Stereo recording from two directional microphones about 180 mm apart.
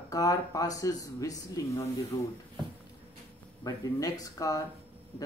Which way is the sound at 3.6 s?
20° left (ahead or behind).